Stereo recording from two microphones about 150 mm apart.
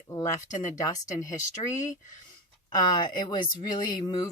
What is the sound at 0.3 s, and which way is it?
Speech, 55° left (ahead or behind).